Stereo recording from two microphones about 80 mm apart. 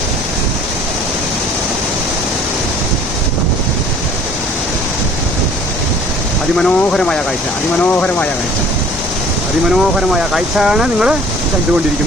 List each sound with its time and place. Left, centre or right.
6.6 s speech: centre
9.6 s speech: centre